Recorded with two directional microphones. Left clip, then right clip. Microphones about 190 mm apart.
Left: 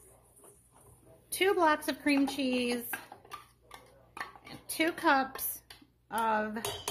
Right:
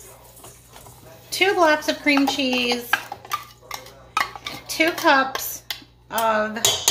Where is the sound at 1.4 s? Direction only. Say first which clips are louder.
Right 10 dB; 50° left (ahead or behind).